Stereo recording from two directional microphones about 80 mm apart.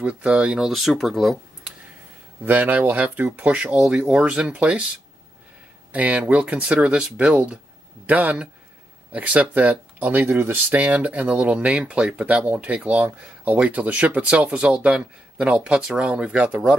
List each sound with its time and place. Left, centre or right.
0.0 s speech: centre
2.4 s speech: right
5.9 s speech: centre